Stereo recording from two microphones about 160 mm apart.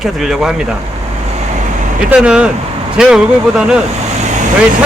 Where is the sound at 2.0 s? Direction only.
5° right (ahead or behind).